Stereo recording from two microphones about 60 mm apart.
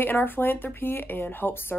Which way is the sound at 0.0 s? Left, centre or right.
Left.